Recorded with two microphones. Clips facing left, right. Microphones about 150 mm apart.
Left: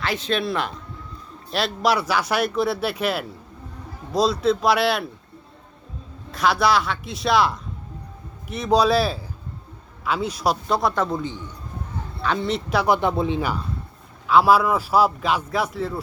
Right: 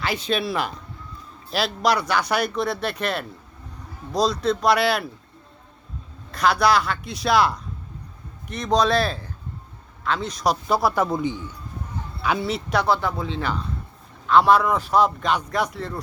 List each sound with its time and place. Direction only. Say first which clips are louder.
0.0 s speech: even; centre (ahead or behind)
6.3 s speech: even; centre (ahead or behind)
12.9 s speech: left 3 dB; 20° left (ahead or behind); by 16.0 s 5° left (ahead or behind)